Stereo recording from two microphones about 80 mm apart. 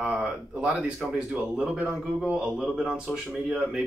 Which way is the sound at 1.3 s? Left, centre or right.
Centre.